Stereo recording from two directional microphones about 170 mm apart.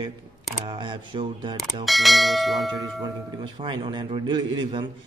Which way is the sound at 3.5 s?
30° right (ahead or behind).